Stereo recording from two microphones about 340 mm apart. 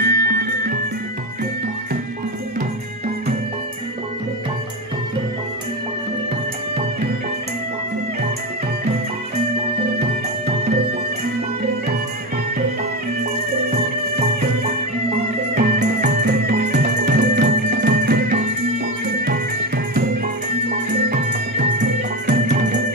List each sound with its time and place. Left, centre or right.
0.0 s music: right
9.9 s music: centre
15.5 s music: right
21.1 s music: right